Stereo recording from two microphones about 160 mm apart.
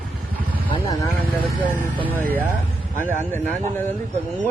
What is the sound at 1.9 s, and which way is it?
Speech, 10° right (ahead or behind).